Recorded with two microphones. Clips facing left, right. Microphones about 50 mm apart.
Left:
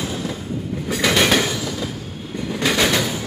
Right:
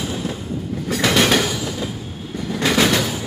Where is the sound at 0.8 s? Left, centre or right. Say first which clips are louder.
Right 1 dB; centre.